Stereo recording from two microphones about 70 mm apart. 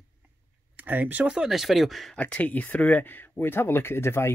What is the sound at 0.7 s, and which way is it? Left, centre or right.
Speech, right.